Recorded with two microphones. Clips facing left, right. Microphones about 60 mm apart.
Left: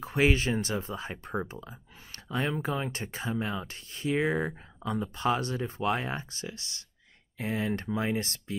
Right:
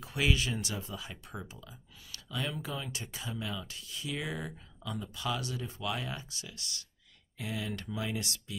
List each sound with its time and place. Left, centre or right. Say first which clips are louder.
0.0 s speech: left 6 dB; left